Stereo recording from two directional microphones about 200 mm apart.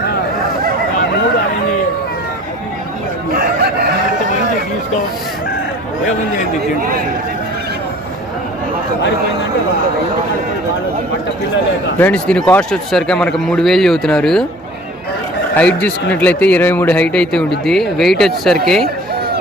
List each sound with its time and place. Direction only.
11.9 s a man's voice: 5° left (ahead or behind)
15.5 s a man's voice: 5° left (ahead or behind)